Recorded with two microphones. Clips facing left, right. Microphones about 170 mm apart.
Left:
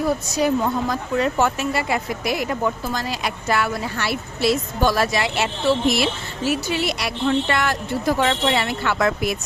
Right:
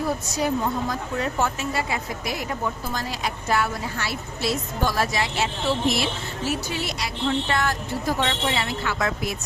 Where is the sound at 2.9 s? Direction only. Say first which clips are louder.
Left 3 dB; 85° left.